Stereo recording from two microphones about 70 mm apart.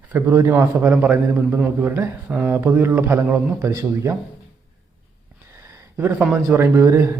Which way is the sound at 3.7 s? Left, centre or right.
Right.